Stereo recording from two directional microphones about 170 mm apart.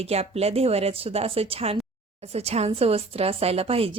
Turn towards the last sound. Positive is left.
turn(degrees=-35)  # may be behind; listen again after turning